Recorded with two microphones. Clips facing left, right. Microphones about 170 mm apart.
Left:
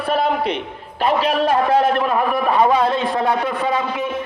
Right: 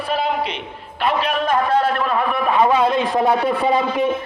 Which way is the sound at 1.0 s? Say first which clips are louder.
Left 2 dB; 35° left (ahead or behind).